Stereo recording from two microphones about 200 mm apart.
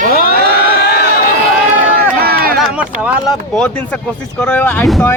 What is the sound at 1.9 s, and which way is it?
Run, 50° right (ahead or behind).